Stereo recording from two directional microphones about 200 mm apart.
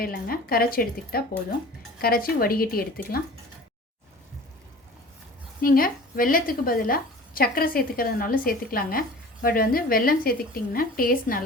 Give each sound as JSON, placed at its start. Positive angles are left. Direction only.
{"t": 0.0, "sound": "a woman's voice", "side_deg": 45}
{"t": 5.6, "sound": "a woman's voice", "side_deg": 45}